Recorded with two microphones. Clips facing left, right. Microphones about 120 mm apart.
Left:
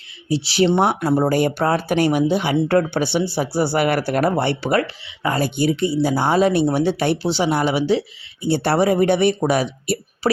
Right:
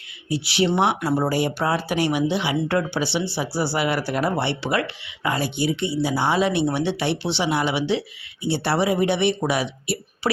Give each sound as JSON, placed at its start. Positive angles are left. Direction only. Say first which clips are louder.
{"t": 0.3, "sound": "speech", "louder": "left 4 dB", "side_deg": 30}
{"t": 1.0, "sound": "speech", "louder": "left 4 dB", "side_deg": 20}
{"t": 1.3, "sound": "speech", "louder": "left 4 dB", "side_deg": 50}